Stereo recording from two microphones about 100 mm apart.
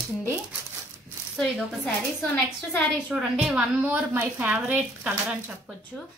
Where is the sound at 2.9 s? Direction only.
5° right (ahead or behind).